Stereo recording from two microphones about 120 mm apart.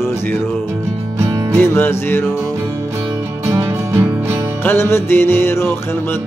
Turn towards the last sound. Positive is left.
turn(degrees=20)  # may be behind; listen again after turning